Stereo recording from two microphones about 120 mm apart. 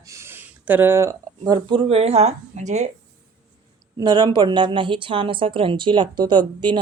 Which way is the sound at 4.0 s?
35° right (ahead or behind).